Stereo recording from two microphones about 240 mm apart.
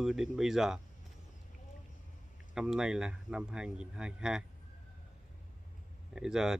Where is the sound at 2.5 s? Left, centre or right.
Centre.